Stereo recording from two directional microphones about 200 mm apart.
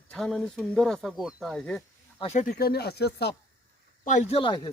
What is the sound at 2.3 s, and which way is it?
Speech, 40° left (ahead or behind).